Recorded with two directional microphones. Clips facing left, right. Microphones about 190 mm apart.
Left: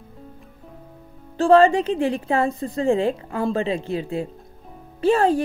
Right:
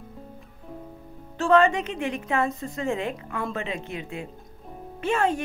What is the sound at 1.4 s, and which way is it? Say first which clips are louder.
Speech: left 5 dB; 30° left (ahead or behind).